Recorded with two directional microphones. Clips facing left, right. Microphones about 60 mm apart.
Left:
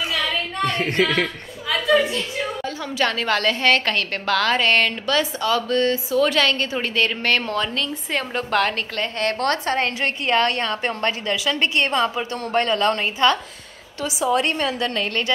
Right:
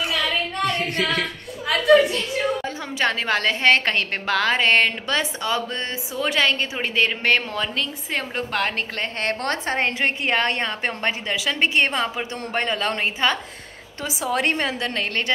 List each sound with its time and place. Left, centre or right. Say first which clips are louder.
0.1 s a sound: even; centre
0.7 s speech: left 5 dB; left
1.2 s a sound: left 1 dB; centre
3.0 s a woman's voice: left 1 dB; right
8.9 s a woman's voice: left 2 dB; right
14.3 s a woman's voice: even; right